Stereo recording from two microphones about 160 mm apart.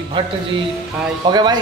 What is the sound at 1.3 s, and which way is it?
Speech, 25° right (ahead or behind).